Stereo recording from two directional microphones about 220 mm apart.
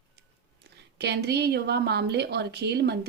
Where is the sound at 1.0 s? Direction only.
50° right (ahead or behind).